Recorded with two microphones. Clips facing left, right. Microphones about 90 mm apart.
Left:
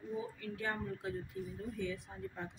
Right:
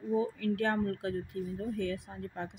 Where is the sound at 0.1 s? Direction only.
75° right (ahead or behind).